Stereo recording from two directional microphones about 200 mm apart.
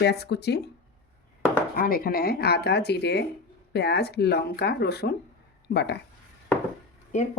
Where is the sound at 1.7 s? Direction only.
45° left (ahead or behind).